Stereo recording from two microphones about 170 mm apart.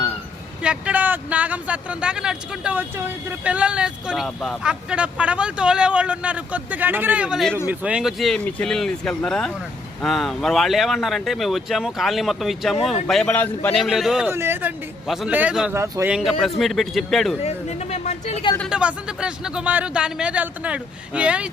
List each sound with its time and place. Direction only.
0.6 s speech: 5° right (ahead or behind); by 13.7 s 10° left (ahead or behind)
13.7 s speech: centre (ahead or behind)
14.3 s speech: 15° right (ahead or behind)
15.0 s speech: centre (ahead or behind)
16.4 s speech: centre (ahead or behind)
17.4 s speech: 40° left (ahead or behind)
18.7 s speech: 5° right (ahead or behind)